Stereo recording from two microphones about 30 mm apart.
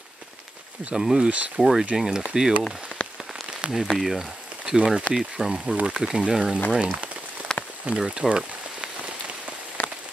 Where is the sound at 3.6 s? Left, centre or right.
Right.